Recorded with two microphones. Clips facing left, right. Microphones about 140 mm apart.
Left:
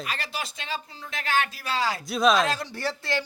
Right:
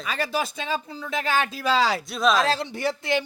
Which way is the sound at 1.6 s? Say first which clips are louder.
Right 6 dB; 90° right.